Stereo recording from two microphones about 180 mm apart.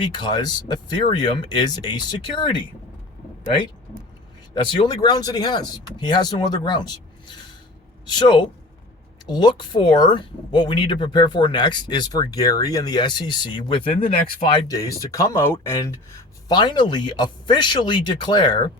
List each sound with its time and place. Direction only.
0.1 s speech: 25° left (ahead or behind)
4.5 s speech: 25° left (ahead or behind)
13.9 s speech: 55° left (ahead or behind)
14.4 s speech: 20° left (ahead or behind)